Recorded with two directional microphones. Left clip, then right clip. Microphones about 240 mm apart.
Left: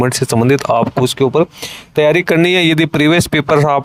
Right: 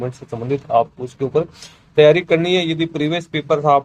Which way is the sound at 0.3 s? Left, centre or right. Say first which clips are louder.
Left 6 dB; left.